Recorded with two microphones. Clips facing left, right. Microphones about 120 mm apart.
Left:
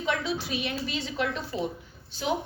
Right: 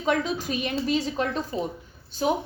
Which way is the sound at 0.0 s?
45° right (ahead or behind).